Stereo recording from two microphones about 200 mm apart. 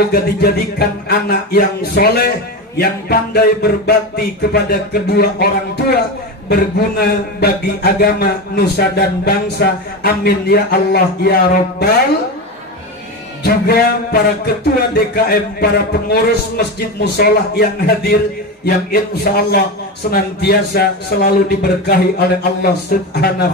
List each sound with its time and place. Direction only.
0.1 s a man's voice: 50° left (ahead or behind)
13.4 s a man's voice: 55° left (ahead or behind)